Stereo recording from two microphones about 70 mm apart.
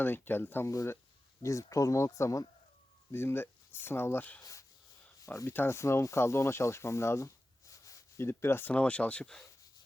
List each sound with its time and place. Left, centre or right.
0.0 s speech: left
1.4 s speech: left
3.1 s speech: left
5.2 s speech: left
5.5 s speech: left
7.7 s a sound: left
8.7 s speech: centre